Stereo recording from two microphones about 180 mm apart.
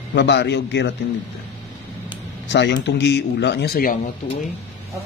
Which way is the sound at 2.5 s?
75° left (ahead or behind).